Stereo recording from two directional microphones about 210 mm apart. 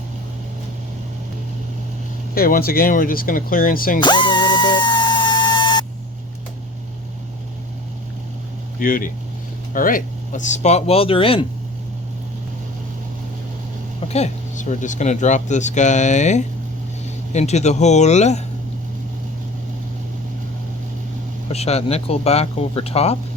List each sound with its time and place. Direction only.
2.3 s speech: 45° left (ahead or behind)
4.0 s a sound: 20° left (ahead or behind)
8.8 s speech: 40° left (ahead or behind); by 11.4 s 25° left (ahead or behind)
14.1 s speech: 35° left (ahead or behind)
21.5 s speech: 30° left (ahead or behind)